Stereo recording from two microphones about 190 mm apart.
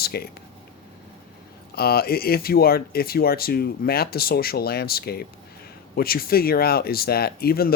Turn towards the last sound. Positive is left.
turn(degrees=50)  # may be behind; listen again after turning